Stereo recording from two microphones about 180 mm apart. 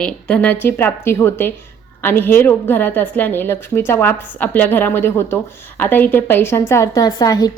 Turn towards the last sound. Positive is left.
turn(degrees=20)  # may be behind; listen again after turning